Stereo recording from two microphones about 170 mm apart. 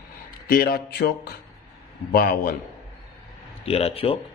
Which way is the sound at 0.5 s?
65° left (ahead or behind).